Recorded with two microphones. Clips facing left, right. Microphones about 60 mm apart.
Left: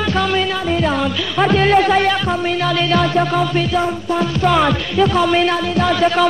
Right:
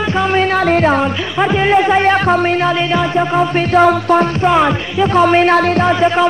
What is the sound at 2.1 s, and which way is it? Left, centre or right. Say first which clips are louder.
Music: right 6 dB; right.